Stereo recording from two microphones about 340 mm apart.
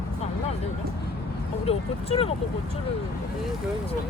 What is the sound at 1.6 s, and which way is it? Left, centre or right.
Speech, centre.